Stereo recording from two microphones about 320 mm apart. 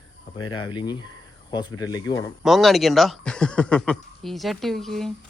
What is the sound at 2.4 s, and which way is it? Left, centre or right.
Speech, centre.